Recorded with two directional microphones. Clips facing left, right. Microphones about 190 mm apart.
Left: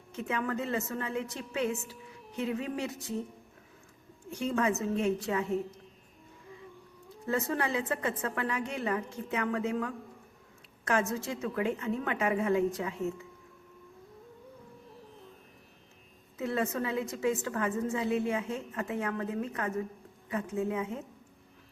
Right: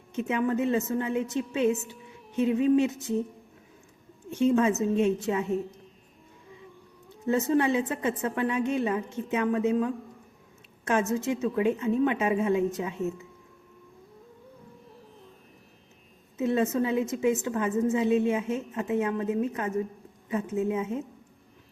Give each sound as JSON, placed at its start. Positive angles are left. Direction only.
{"t": 0.1, "sound": "a woman's voice", "side_deg": -20}
{"t": 4.3, "sound": "a woman's voice", "side_deg": -25}
{"t": 7.3, "sound": "a woman's voice", "side_deg": -20}
{"t": 16.4, "sound": "a woman's voice", "side_deg": -20}